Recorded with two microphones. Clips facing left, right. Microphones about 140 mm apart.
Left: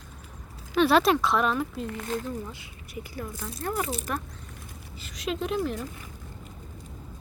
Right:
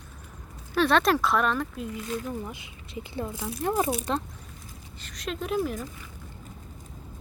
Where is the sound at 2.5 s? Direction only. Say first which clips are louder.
Right 2 dB; 20° right (ahead or behind).